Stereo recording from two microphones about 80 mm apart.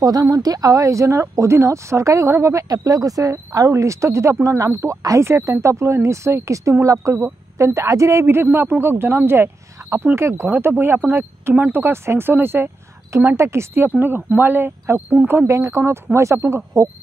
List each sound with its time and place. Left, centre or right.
0.0 s a woman's voice: right
15.5 s a woman's voice: right